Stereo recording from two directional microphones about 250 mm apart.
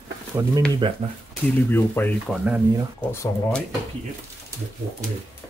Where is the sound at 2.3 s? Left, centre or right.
Centre.